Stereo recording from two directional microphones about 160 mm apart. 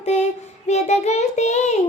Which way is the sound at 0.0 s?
45° left (ahead or behind).